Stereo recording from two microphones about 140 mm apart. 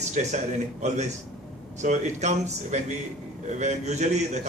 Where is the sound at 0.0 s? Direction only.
55° right (ahead or behind).